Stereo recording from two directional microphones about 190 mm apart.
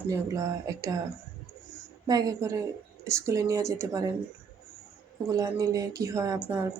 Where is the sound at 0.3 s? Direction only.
15° right (ahead or behind).